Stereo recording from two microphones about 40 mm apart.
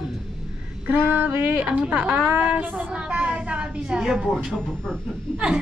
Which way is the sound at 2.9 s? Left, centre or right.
Right.